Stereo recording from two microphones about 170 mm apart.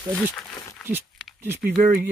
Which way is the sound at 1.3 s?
15° right (ahead or behind).